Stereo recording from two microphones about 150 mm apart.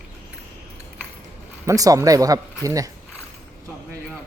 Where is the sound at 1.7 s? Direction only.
20° right (ahead or behind).